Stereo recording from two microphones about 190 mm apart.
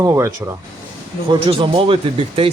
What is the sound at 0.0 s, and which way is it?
Speech, 15° right (ahead or behind).